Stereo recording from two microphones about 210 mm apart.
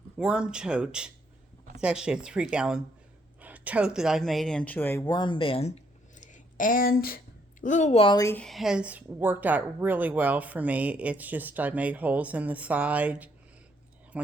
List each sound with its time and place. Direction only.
0.2 s speech: 5° right (ahead or behind); by 5.7 s 30° left (ahead or behind)
6.1 s a sound: 40° left (ahead or behind)
7.6 s speech: 35° left (ahead or behind); by 13.3 s 5° right (ahead or behind)